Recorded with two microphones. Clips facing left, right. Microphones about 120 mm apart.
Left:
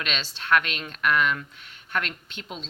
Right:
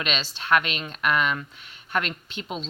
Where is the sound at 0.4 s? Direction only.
10° right (ahead or behind).